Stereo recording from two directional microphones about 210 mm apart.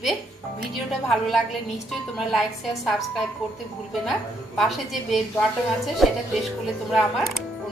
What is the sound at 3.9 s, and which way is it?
A woman's voice, centre (ahead or behind).